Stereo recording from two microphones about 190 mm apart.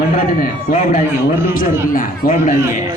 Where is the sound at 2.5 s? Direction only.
15° right (ahead or behind).